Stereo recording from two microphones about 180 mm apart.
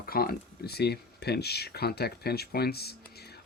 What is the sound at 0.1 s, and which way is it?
Speech, 55° left (ahead or behind).